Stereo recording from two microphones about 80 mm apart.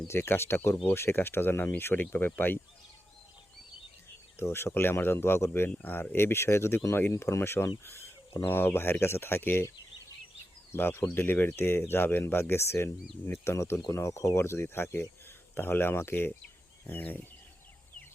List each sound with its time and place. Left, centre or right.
0.1 s speech: left
4.4 s speech: left
7.9 s a sound: left
8.4 s speech: left